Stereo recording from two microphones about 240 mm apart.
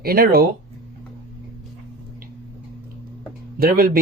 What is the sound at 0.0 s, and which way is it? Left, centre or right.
Speech, right.